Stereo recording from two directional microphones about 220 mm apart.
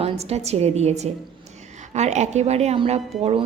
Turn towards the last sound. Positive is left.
turn(degrees=-30)  # may be behind; listen again after turning